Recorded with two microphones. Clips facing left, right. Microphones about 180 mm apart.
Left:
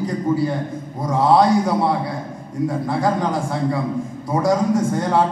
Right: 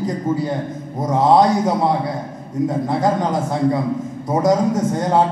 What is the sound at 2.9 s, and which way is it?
A man's voice, 20° right (ahead or behind).